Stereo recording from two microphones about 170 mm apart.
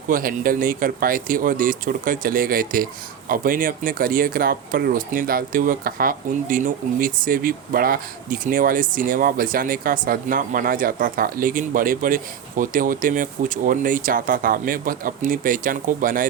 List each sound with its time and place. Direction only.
0.1 s speech: 55° right (ahead or behind)